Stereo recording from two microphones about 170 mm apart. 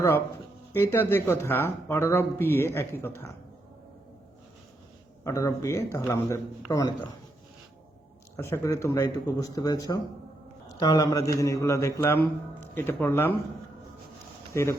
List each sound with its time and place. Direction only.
0.7 s speech: 15° left (ahead or behind)
5.2 s speech: 20° left (ahead or behind)
8.4 s speech: 15° left (ahead or behind)
14.5 s speech: 15° left (ahead or behind)